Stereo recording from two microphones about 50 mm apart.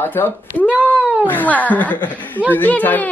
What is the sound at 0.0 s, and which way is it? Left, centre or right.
Speech, left.